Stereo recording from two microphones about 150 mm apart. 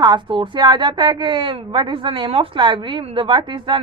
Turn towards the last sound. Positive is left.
turn(degrees=-30)  # may be behind; listen again after turning